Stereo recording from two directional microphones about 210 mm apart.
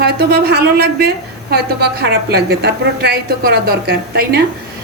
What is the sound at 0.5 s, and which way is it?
A woman's voice, 50° right (ahead or behind).